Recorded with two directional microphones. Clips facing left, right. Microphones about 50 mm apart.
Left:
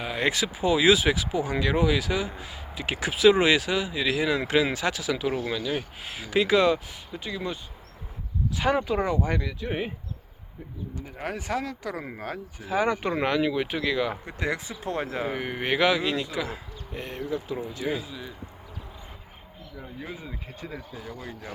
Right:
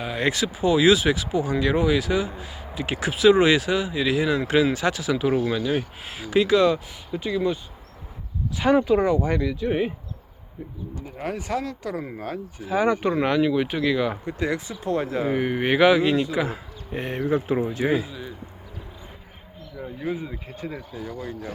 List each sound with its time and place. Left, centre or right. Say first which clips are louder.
0.0 s speech: right 2 dB; centre
5.3 s speech: right 6 dB; centre
11.3 s speech: right 1 dB; centre
14.3 s speech: right 4 dB; centre
15.3 s speech: right 6 dB; centre
16.9 s speech: right 7 dB; right
17.2 s speech: right 9 dB; right
17.9 s speech: right 7 dB; centre
19.8 s speech: right 9 dB; centre